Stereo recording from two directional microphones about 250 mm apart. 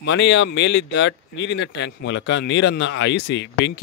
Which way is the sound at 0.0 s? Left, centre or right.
Left.